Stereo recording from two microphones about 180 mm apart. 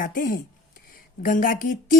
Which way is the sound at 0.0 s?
50° left (ahead or behind).